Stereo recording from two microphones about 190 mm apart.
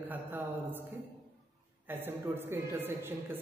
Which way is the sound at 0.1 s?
10° right (ahead or behind).